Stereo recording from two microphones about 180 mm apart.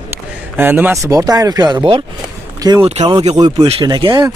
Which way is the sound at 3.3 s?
20° right (ahead or behind).